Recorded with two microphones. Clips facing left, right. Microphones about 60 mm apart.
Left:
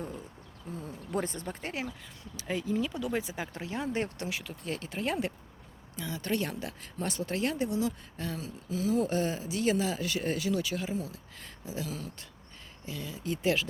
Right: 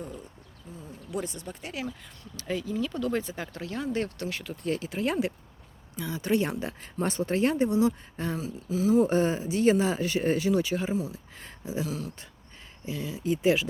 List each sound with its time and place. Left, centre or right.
0.8 s speech: left
2.3 s speech: centre
2.9 s speech: centre
4.3 s speech: centre
6.3 s speech: right
8.4 s speech: centre
9.0 s speech: right
11.3 s a sound: right
11.9 s speech: centre
12.8 s speech: centre